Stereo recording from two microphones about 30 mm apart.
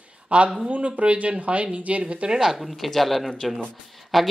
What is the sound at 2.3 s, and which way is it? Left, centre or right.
Speech, right.